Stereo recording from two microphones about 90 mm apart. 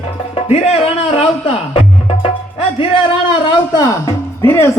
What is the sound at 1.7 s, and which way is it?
Music, 90° left.